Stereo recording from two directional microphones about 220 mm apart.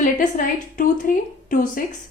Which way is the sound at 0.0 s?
35° left (ahead or behind).